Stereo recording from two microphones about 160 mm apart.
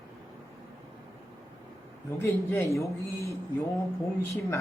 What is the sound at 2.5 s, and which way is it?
Speech, 15° left (ahead or behind).